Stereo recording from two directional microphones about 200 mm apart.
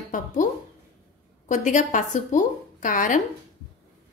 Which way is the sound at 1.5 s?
40° left (ahead or behind).